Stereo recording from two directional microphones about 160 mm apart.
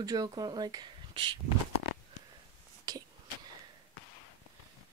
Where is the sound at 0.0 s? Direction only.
25° right (ahead or behind).